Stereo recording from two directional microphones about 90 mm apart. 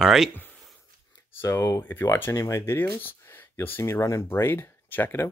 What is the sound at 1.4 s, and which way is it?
Speech, 30° left (ahead or behind).